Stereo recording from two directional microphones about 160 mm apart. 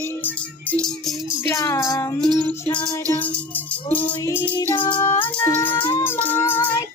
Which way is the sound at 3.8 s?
10° left (ahead or behind).